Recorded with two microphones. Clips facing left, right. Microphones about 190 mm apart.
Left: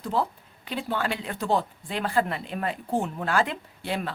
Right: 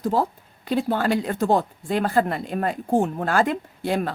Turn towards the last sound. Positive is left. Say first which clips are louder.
# right 6 dB
turn(degrees=-45)  # may be behind; listen again after turning